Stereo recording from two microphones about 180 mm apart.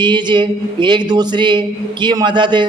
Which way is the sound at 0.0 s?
25° right (ahead or behind).